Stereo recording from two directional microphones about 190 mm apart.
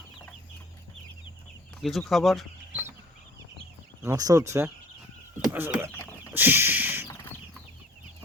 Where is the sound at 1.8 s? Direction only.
Centre (ahead or behind).